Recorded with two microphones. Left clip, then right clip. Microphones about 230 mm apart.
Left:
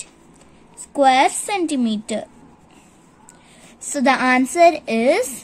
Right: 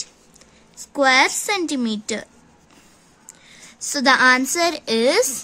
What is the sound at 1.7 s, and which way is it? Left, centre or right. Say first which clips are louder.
Speech: left 2 dB; right.